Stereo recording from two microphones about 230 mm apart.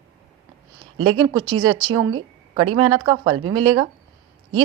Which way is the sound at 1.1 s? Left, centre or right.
Centre.